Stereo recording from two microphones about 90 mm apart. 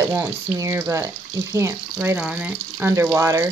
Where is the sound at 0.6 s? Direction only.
30° right (ahead or behind).